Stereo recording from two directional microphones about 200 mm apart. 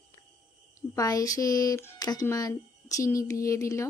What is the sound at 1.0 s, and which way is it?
Speech, 15° left (ahead or behind).